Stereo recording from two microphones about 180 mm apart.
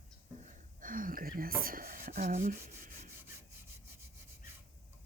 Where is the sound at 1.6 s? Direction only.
50° right (ahead or behind).